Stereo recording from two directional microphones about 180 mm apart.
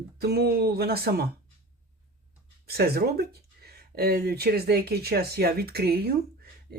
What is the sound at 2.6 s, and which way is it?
Speech, 60° right (ahead or behind).